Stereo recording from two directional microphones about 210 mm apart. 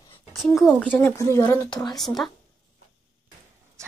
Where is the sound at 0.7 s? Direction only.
5° right (ahead or behind).